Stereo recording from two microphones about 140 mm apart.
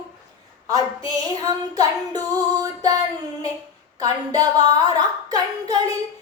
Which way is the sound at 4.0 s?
25° right (ahead or behind).